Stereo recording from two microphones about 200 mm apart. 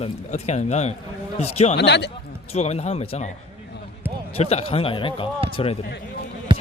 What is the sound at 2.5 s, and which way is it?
Speech, 30° left (ahead or behind).